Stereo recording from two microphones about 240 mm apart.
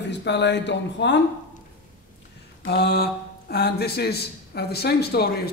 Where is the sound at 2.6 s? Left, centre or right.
Left.